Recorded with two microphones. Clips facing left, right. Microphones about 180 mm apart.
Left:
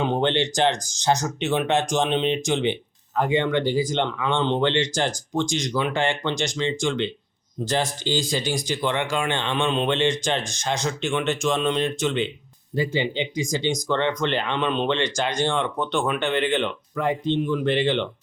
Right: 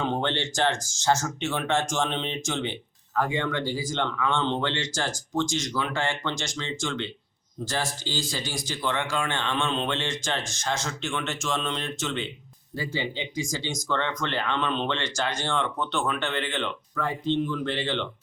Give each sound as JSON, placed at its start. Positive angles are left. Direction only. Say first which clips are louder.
{"t": 0.0, "sound": "speech", "louder": "left 5 dB", "side_deg": 15}